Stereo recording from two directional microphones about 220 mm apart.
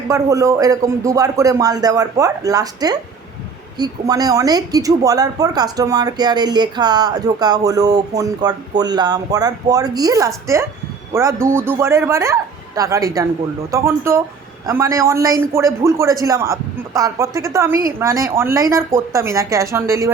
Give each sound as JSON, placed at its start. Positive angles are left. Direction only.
{"t": 0.1, "sound": "speech", "side_deg": -15}